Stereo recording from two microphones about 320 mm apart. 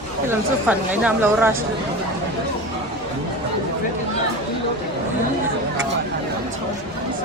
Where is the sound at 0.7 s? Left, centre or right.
Centre.